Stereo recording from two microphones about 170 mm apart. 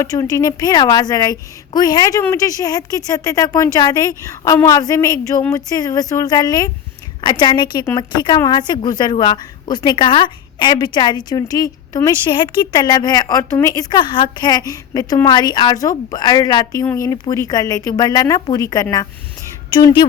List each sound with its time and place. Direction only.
0.0 s a woman's voice: 20° left (ahead or behind)